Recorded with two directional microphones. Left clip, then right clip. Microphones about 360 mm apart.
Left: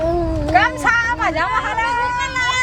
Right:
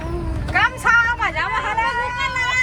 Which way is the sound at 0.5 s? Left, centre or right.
Left.